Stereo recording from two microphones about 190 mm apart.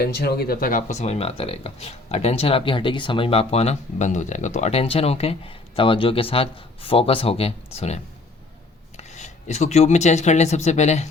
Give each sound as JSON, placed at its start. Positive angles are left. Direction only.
{"t": 0.0, "sound": "speech", "side_deg": 55}